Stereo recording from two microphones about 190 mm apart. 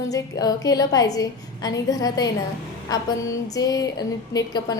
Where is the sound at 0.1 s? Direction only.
20° left (ahead or behind).